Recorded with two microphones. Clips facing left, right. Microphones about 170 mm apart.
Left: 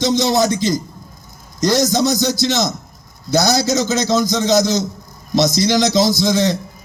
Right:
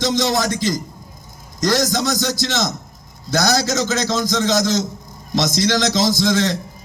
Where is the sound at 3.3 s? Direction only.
20° left (ahead or behind).